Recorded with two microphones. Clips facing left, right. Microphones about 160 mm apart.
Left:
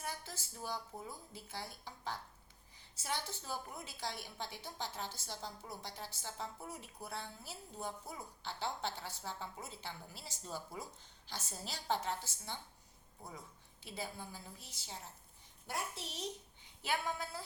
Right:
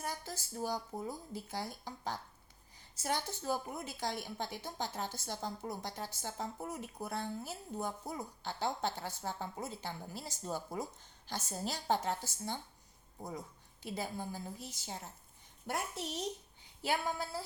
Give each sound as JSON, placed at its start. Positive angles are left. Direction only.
{"t": 0.0, "sound": "a woman's voice", "side_deg": -40}
{"t": 13.8, "sound": "a woman's voice", "side_deg": -45}
{"t": 16.8, "sound": "speech", "side_deg": -35}